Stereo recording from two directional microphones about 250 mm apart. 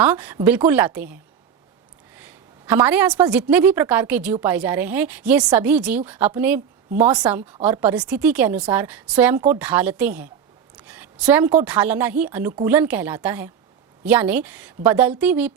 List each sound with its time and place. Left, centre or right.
0.0 s a woman's voice: centre